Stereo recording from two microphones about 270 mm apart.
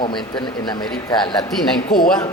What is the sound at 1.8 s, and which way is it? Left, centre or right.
Speech, left.